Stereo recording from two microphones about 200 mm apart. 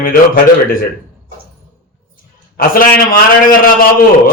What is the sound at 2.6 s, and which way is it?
Speech, 45° left (ahead or behind).